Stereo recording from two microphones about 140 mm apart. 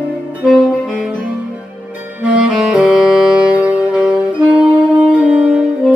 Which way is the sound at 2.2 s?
10° right (ahead or behind).